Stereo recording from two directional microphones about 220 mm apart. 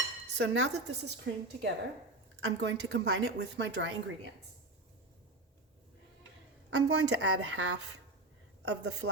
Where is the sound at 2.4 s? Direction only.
55° right (ahead or behind).